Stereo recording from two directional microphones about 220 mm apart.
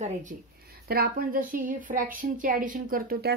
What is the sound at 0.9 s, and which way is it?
A woman's voice, 40° right (ahead or behind).